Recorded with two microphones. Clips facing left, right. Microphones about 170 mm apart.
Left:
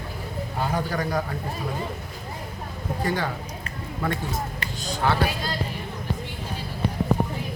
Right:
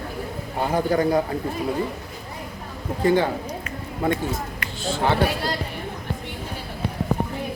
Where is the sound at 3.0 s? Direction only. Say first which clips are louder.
Right 8 dB; 25° right (ahead or behind).